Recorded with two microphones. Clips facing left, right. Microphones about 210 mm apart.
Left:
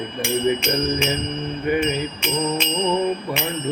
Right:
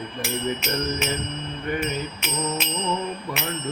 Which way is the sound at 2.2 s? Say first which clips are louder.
Left 5 dB; 5° right (ahead or behind).